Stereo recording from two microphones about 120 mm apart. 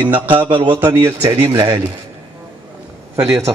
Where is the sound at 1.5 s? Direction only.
45° right (ahead or behind).